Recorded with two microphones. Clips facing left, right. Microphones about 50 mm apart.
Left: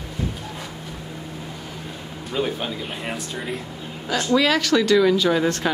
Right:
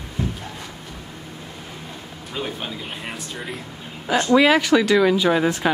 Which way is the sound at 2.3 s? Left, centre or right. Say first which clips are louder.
Left 4 dB; centre.